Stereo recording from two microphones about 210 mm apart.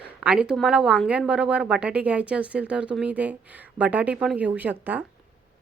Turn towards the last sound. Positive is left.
turn(degrees=-10)  # may be behind; listen again after turning